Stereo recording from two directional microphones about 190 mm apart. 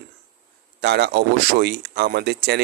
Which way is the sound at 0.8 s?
60° right (ahead or behind).